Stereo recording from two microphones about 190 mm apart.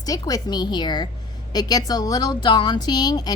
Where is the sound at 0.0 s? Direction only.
20° left (ahead or behind).